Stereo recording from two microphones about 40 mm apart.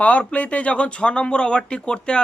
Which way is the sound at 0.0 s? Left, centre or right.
Left.